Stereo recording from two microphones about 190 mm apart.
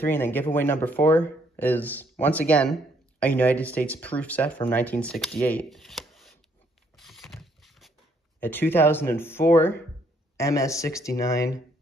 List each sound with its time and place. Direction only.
0.0 s speech: 10° left (ahead or behind)
7.0 s patter: centre (ahead or behind)
8.4 s speech: 10° left (ahead or behind)